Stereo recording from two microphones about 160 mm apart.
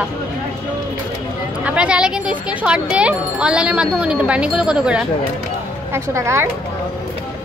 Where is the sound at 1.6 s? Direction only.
5° right (ahead or behind).